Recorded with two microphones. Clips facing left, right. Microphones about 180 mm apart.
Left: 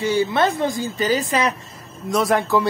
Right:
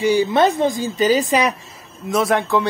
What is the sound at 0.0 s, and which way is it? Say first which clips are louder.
Speech: right 3 dB; 15° right (ahead or behind).